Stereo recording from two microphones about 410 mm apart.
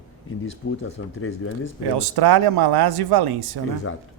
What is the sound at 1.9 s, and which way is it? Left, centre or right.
Speech, right.